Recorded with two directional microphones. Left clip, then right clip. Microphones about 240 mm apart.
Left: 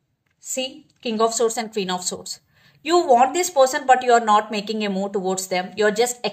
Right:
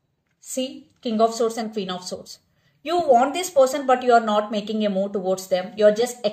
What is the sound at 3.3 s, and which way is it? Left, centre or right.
Speech, left.